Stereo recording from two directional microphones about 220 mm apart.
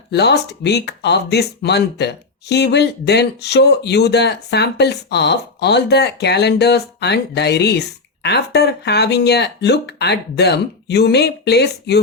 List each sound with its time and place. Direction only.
0.1 s speech: 50° left (ahead or behind)